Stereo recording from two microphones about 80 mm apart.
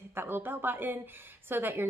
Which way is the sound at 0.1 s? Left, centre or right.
Right.